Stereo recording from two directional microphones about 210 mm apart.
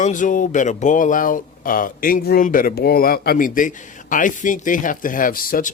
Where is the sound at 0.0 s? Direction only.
35° left (ahead or behind).